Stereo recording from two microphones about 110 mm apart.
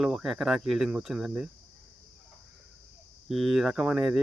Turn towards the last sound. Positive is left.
turn(degrees=-5)  # may be behind; listen again after turning